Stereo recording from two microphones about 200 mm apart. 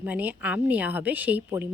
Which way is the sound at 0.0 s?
10° right (ahead or behind).